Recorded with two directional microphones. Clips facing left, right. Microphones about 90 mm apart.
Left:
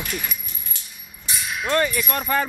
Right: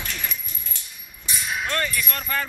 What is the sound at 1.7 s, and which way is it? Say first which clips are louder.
Speech: left 10 dB; 15° left (ahead or behind).